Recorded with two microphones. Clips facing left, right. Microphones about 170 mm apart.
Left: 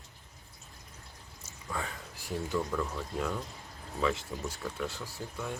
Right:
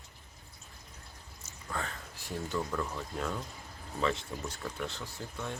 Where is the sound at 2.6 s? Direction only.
Centre (ahead or behind).